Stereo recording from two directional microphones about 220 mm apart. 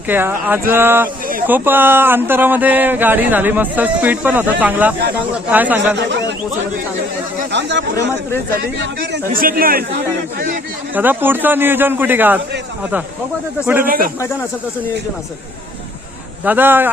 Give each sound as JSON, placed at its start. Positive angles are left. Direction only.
{"t": 0.1, "sound": "speech", "side_deg": -10}
{"t": 6.0, "sound": "speech", "side_deg": -55}
{"t": 7.5, "sound": "a man's voice", "side_deg": -55}
{"t": 10.9, "sound": "speech", "side_deg": -10}
{"t": 13.8, "sound": "a man's voice", "side_deg": -40}
{"t": 16.4, "sound": "speech", "side_deg": -10}